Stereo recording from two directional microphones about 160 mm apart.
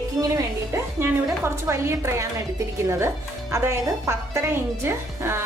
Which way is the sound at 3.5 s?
15° right (ahead or behind).